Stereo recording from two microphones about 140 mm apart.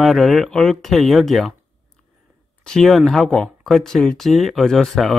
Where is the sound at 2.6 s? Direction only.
5° left (ahead or behind).